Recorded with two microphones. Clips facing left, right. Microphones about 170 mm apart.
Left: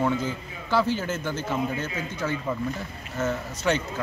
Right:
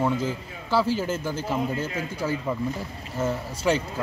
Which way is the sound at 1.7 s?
10° right (ahead or behind).